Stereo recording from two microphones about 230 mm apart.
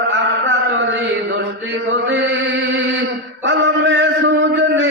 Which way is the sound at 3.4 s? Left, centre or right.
Right.